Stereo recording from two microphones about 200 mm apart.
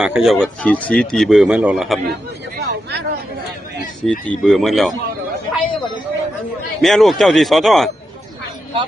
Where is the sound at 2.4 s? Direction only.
55° right (ahead or behind).